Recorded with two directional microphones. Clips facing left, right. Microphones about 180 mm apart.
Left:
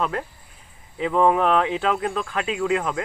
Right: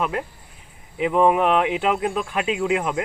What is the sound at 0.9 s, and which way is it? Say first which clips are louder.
Speech: right 1 dB; 15° right (ahead or behind).